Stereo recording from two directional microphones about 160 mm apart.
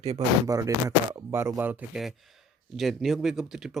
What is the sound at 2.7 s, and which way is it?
Speech, centre (ahead or behind).